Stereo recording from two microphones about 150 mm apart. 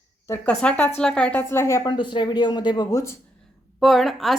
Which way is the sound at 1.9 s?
30° left (ahead or behind).